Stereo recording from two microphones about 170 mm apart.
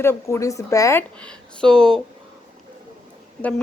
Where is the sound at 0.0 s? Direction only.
15° left (ahead or behind).